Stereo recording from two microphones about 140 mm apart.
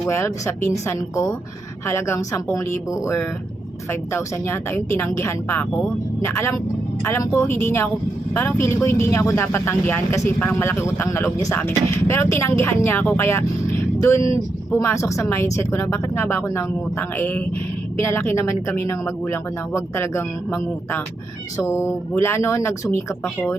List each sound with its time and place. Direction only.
0.1 s speech: 20° left (ahead or behind)
14.7 s speech: 20° left (ahead or behind)